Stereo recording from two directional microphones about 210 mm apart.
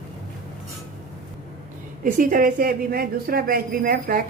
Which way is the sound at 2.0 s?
40° right (ahead or behind).